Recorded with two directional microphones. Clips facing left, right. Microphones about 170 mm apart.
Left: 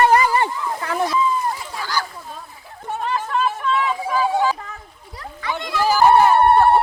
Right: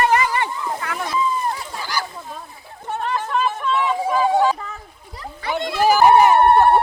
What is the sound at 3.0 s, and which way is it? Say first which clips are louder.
Chatter: even; centre (ahead or behind).